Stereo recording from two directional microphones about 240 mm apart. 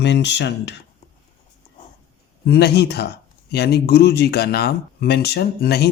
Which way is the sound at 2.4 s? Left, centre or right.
Left.